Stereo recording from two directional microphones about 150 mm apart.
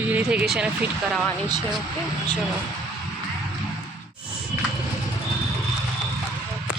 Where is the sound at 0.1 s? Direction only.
10° right (ahead or behind).